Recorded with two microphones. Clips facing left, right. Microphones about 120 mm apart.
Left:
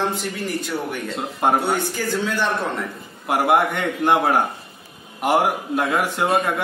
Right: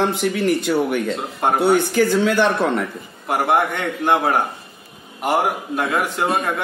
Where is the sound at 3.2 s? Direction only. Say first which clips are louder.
Even; 5° left (ahead or behind).